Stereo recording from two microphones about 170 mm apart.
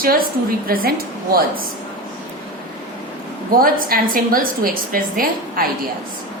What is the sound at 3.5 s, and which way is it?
A woman's voice, 60° right (ahead or behind).